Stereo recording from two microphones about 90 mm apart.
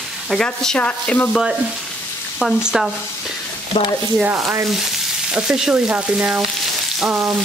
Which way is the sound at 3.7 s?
90° left.